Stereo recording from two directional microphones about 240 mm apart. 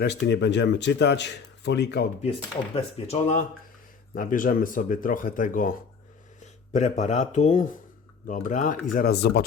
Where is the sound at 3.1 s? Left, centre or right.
Left.